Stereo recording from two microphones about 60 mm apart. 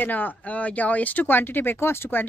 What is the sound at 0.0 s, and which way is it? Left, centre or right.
Speech, left.